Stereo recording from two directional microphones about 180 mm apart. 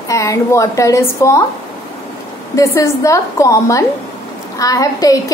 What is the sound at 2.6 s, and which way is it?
A woman's voice, 15° left (ahead or behind).